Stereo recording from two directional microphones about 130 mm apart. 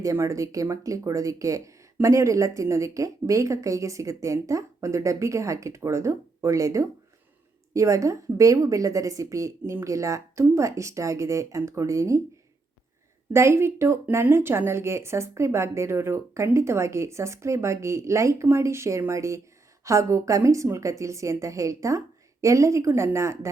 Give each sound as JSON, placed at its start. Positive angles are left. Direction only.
{"t": 0.0, "sound": "speech", "side_deg": -25}
{"t": 13.3, "sound": "speech", "side_deg": -20}